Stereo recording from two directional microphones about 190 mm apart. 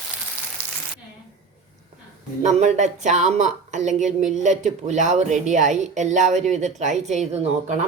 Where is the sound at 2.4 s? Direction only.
40° right (ahead or behind).